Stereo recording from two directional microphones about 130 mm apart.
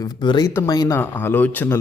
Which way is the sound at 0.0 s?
35° left (ahead or behind).